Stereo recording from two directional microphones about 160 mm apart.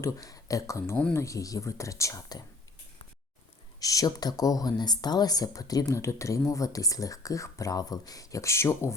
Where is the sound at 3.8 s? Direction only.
20° left (ahead or behind).